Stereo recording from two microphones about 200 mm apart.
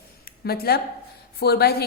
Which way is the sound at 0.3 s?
50° left (ahead or behind).